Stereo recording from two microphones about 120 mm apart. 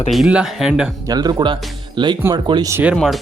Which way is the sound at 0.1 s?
5° right (ahead or behind).